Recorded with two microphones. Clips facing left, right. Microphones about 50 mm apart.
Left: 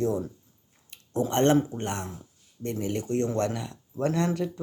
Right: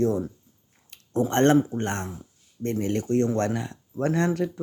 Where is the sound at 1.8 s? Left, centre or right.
Right.